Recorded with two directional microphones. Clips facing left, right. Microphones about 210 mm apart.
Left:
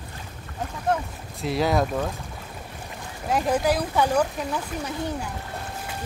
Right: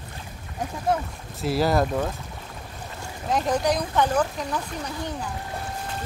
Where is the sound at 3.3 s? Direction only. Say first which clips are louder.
Left 1 dB; 5° left (ahead or behind).